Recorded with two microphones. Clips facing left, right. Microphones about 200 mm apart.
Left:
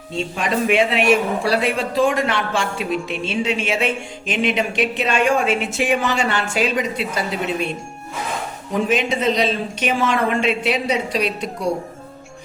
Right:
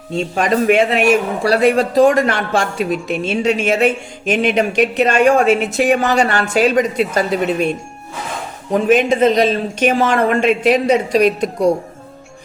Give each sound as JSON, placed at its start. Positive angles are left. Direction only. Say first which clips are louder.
{"t": 0.3, "sound": "a man's voice", "louder": "right 5 dB", "side_deg": -45}
{"t": 8.7, "sound": "a man's voice", "louder": "right 7 dB", "side_deg": -50}